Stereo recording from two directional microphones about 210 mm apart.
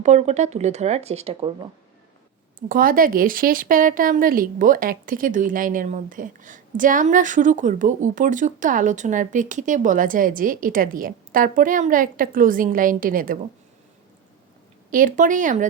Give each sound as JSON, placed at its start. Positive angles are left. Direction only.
{"t": 0.0, "sound": "speech", "side_deg": -30}
{"t": 2.6, "sound": "speech", "side_deg": -40}
{"t": 14.8, "sound": "speech", "side_deg": -40}